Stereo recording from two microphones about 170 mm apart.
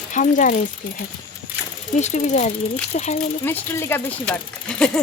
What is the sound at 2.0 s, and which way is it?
Speech, 45° left (ahead or behind).